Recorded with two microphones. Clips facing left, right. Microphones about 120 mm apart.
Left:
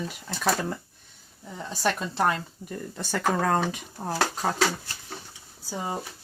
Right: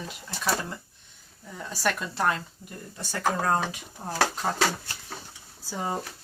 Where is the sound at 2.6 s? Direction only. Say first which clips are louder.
Left 6 dB; 60° left (ahead or behind).